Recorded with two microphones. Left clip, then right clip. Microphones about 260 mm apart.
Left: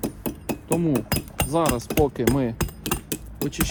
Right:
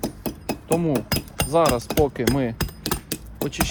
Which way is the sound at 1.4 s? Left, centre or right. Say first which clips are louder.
Right 4 dB; centre.